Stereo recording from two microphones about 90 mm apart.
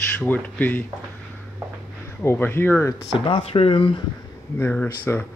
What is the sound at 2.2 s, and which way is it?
Speech, 25° left (ahead or behind).